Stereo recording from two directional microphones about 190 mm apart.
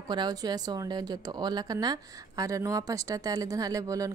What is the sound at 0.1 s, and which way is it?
A woman's voice, 20° right (ahead or behind).